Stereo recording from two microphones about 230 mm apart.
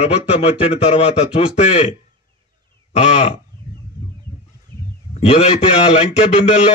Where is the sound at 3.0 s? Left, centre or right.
Left.